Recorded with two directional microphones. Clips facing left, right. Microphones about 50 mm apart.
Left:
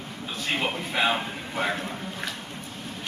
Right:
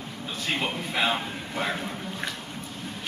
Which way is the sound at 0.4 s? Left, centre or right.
Centre.